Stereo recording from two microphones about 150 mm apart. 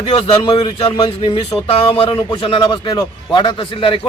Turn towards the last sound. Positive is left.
turn(degrees=35)  # may be behind; listen again after turning